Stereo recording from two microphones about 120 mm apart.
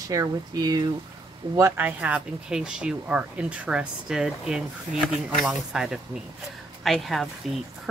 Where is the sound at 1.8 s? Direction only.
15° right (ahead or behind).